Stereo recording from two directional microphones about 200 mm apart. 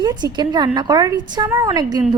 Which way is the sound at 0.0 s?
20° right (ahead or behind).